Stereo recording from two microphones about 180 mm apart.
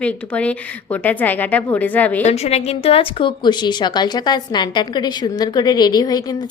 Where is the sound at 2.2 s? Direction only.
35° left (ahead or behind).